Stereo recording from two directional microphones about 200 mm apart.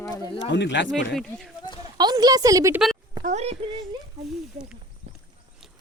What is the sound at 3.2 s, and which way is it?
Speech, 35° right (ahead or behind).